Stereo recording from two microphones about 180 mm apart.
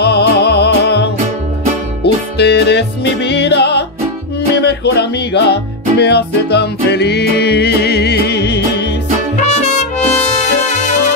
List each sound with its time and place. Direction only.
0.0 s music: 65° left (ahead or behind)
2.3 s music: 70° left (ahead or behind)
9.4 s music: 40° left (ahead or behind)